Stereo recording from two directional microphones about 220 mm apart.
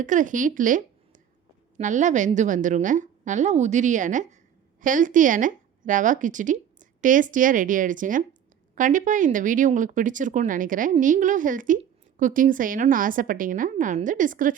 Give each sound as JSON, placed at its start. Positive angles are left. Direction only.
{"t": 0.0, "sound": "a woman's voice", "side_deg": -35}